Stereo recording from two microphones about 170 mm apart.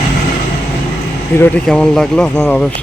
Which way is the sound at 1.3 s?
15° left (ahead or behind).